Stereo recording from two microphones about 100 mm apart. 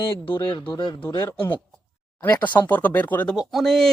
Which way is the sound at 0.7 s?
50° left (ahead or behind).